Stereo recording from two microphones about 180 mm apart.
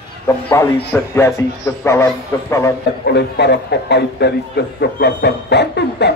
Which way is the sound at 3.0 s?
65° left (ahead or behind).